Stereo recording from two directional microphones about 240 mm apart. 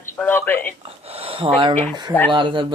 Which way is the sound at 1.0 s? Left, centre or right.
Right.